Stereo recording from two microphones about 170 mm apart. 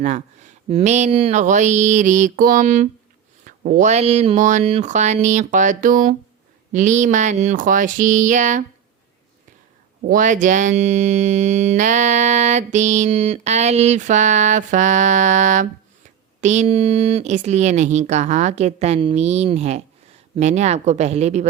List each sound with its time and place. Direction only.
0.0 s speech: 45° right (ahead or behind)
10.1 s speech: 50° right (ahead or behind)